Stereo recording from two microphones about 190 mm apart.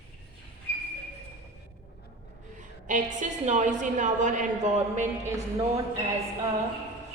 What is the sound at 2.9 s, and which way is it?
A woman's voice, 40° right (ahead or behind).